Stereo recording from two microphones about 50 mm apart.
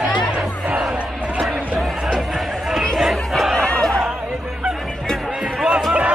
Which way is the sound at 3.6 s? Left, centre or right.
Centre.